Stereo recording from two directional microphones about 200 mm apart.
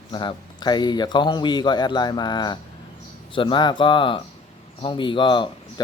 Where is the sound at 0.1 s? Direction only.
20° left (ahead or behind).